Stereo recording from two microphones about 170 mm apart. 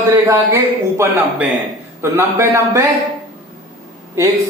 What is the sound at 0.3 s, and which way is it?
Speech, 15° right (ahead or behind).